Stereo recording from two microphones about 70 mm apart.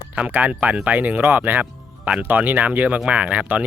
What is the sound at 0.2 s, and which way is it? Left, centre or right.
Speech, right.